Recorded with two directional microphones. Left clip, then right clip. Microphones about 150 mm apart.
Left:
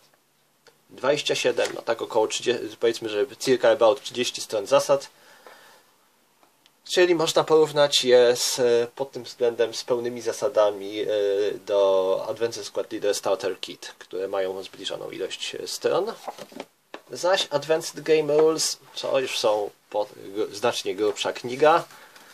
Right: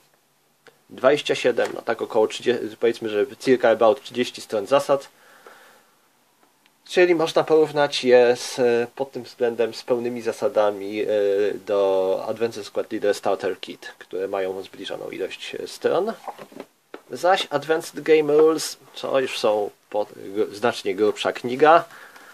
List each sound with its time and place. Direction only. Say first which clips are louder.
0.9 s speech: right 4 dB; 40° right (ahead or behind)
6.8 s speech: right 2 dB; 30° right (ahead or behind)
17.1 s speech: right 3 dB; 45° right (ahead or behind)